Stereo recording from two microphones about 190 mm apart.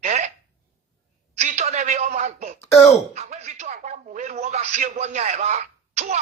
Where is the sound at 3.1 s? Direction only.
35° right (ahead or behind).